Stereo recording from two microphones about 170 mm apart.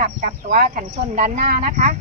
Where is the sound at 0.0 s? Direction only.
50° right (ahead or behind).